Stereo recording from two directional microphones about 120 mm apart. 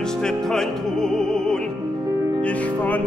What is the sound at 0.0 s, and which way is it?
Music, 5° left (ahead or behind).